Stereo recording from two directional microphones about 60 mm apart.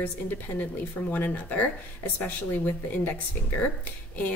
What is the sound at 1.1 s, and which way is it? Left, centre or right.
Speech, left.